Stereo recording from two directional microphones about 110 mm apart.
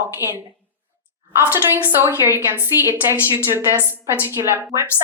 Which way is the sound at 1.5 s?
20° right (ahead or behind).